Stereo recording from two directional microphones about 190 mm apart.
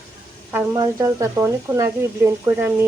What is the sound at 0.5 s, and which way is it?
Speech, 15° right (ahead or behind).